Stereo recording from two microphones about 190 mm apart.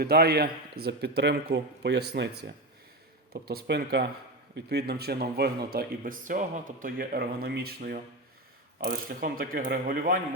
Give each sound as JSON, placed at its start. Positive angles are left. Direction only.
{"t": 0.0, "sound": "speech", "side_deg": -55}